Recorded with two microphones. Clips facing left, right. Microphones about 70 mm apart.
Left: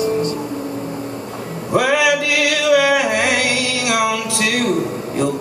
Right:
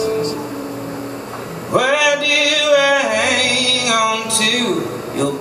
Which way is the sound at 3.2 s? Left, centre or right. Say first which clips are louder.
Even; left.